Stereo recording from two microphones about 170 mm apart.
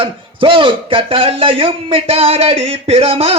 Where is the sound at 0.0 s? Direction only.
30° right (ahead or behind).